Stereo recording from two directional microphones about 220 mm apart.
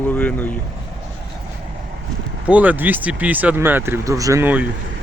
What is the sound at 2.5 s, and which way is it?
Speech, 5° right (ahead or behind).